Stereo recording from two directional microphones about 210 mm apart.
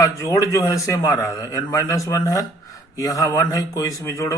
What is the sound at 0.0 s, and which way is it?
Speech, 15° left (ahead or behind).